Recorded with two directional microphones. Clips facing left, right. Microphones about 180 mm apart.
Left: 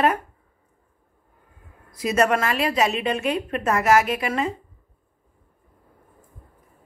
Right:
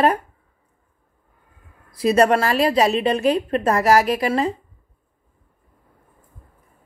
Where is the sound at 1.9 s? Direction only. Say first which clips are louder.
Right 5 dB; 30° right (ahead or behind).